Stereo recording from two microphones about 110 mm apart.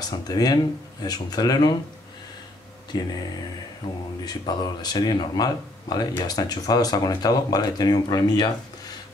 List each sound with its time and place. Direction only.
0.3 s speech: 35° left (ahead or behind)
2.9 s speech: 40° left (ahead or behind)
4.2 s speech: 40° left (ahead or behind)